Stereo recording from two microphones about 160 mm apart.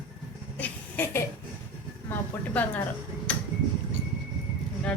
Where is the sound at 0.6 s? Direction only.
10° left (ahead or behind).